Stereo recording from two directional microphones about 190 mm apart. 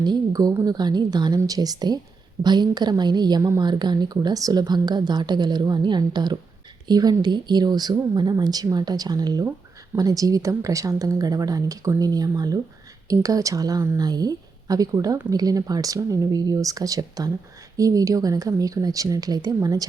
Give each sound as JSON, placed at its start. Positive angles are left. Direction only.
{"t": 0.0, "sound": "a woman's voice", "side_deg": -20}